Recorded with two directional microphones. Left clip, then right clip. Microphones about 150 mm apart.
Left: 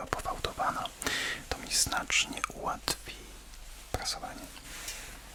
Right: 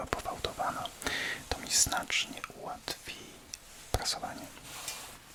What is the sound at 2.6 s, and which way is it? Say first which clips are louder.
Whispering: left 5 dB; 50° left (ahead or behind).